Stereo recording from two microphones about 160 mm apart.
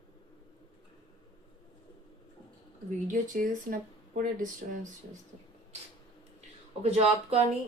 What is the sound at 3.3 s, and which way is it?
Speech, 60° right (ahead or behind).